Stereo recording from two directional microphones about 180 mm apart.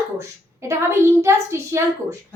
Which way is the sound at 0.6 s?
15° right (ahead or behind).